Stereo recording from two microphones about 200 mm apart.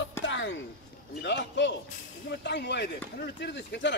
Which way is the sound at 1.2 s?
60° left (ahead or behind).